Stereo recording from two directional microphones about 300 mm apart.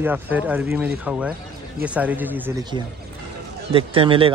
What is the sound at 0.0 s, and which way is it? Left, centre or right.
Speech, centre.